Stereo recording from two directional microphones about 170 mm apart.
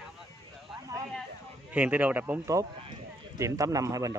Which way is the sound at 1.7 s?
10° right (ahead or behind).